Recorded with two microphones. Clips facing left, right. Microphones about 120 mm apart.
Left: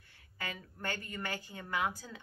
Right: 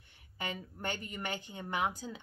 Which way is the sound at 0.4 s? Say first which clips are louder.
Right 3 dB; 20° right (ahead or behind).